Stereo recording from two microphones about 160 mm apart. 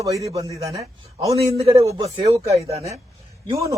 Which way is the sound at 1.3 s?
40° right (ahead or behind).